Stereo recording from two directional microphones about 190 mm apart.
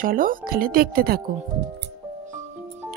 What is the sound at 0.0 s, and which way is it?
Speech, 45° right (ahead or behind).